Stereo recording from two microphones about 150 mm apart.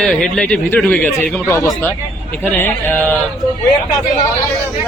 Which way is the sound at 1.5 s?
20° left (ahead or behind).